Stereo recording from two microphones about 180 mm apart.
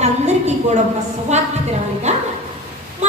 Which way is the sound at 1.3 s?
40° right (ahead or behind).